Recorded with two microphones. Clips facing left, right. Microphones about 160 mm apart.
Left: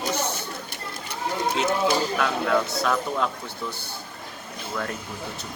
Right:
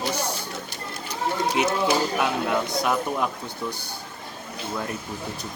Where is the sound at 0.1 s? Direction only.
10° right (ahead or behind).